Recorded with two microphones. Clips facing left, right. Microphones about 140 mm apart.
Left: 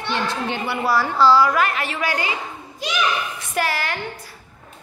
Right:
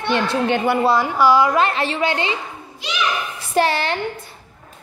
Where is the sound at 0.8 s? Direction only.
20° right (ahead or behind).